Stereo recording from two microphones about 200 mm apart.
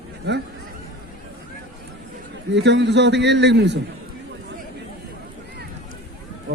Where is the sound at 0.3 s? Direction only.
55° right (ahead or behind).